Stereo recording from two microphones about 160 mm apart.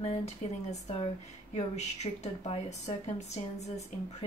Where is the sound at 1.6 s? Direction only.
45° left (ahead or behind).